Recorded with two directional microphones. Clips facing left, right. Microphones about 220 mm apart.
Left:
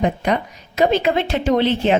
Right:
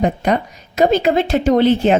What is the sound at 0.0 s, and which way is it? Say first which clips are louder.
A woman's voice: right 2 dB; 45° right (ahead or behind).